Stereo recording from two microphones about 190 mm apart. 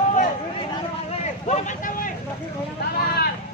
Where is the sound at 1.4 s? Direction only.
40° left (ahead or behind).